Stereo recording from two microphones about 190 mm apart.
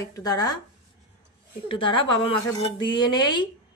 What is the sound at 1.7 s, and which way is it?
A woman's voice, 25° left (ahead or behind).